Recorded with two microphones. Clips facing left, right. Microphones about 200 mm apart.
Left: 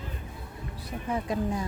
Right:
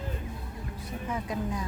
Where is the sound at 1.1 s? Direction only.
30° left (ahead or behind).